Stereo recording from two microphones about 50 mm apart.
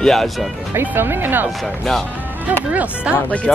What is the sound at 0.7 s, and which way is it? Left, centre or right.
Speech, right.